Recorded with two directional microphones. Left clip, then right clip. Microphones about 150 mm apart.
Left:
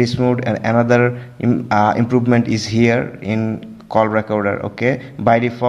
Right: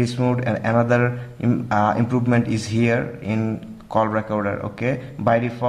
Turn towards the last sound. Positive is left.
turn(degrees=25)  # may be behind; listen again after turning